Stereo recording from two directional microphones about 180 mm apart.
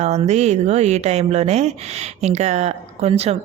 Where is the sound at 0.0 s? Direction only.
40° right (ahead or behind).